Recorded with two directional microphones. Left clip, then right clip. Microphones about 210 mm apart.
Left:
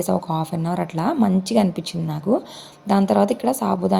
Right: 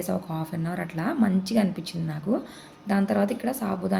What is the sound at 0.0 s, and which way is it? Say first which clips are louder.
A woman's voice: left 8 dB; 30° left (ahead or behind).